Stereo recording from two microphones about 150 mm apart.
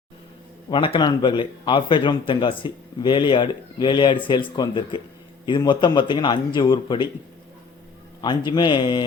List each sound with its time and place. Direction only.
0.7 s speech: 35° left (ahead or behind)
8.2 s speech: 30° left (ahead or behind)